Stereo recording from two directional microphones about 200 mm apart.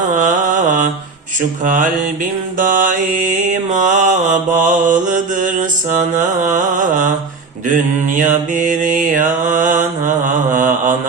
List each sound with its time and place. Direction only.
0.1 s mantra: 40° right (ahead or behind)